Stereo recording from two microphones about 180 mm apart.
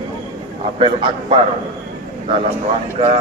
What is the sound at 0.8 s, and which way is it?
Speech, 30° right (ahead or behind).